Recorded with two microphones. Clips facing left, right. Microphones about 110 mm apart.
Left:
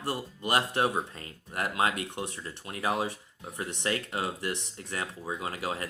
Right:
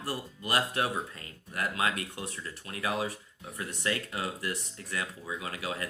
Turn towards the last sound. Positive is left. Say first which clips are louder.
# left 2 dB
turn(degrees=30)  # may be behind; listen again after turning